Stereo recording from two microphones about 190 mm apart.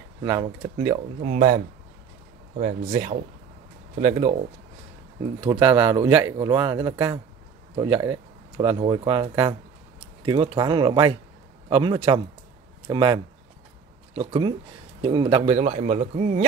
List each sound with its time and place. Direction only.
0.2 s speech: 15° right (ahead or behind)
1.2 s a man's voice: 40° right (ahead or behind)
5.5 s a man's voice: 20° right (ahead or behind); by 16.4 s 40° right (ahead or behind)